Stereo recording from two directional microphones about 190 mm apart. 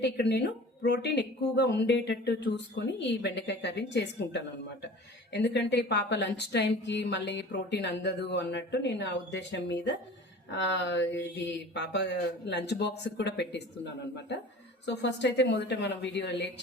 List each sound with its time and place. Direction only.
0.0 s speech: 60° left (ahead or behind)